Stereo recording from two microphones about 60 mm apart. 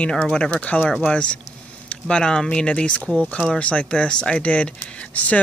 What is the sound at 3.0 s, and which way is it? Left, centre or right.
Speech, right.